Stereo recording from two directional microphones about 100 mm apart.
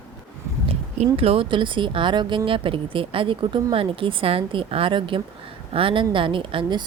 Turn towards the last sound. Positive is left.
turn(degrees=-55)  # may be behind; listen again after turning